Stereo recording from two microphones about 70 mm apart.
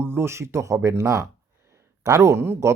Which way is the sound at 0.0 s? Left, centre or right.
Right.